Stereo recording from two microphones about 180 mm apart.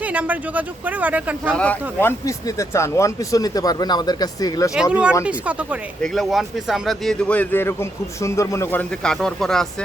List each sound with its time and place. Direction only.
0.0 s speech: 10° right (ahead or behind)
1.5 s speech: 10° left (ahead or behind)
4.7 s a man's voice: 5° right (ahead or behind)